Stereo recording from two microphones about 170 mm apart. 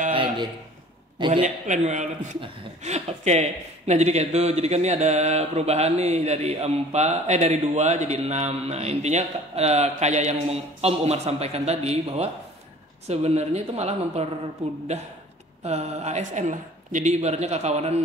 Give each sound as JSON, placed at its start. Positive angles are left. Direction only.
{"t": 0.1, "sound": "a sound", "side_deg": -30}
{"t": 1.1, "sound": "a man's voice", "side_deg": -30}
{"t": 1.4, "sound": "speech", "side_deg": -40}